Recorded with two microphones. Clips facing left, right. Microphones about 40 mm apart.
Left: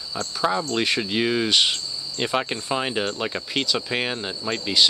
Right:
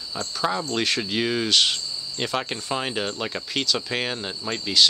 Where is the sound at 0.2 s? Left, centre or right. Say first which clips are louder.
Left 2 dB; centre.